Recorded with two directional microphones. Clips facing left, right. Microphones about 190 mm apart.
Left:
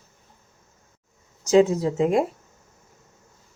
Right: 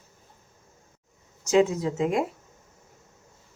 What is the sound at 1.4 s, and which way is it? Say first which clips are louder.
Speech: left 4 dB; 35° left (ahead or behind).